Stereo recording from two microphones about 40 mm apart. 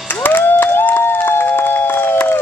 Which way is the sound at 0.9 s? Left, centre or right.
Left.